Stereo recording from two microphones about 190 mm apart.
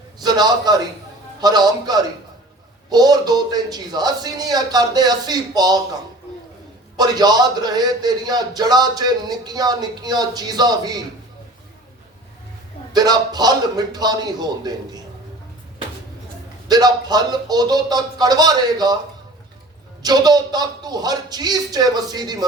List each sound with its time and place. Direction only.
0.2 s a man's voice: 20° right (ahead or behind)
6.9 s a man's voice: 20° right (ahead or behind)
12.9 s a man's voice: 20° right (ahead or behind)
16.6 s a man's voice: 20° right (ahead or behind)
20.0 s a man's voice: 20° right (ahead or behind)